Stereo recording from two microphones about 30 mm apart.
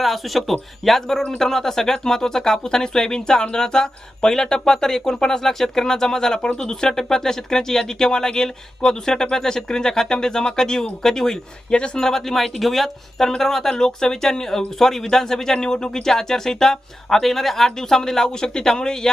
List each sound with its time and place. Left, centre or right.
0.0 s speech: centre
1.0 s speech: centre
12.4 s speech: centre; by 19.1 s left